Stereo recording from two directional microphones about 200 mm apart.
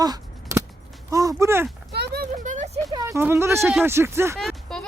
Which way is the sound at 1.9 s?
55° right (ahead or behind).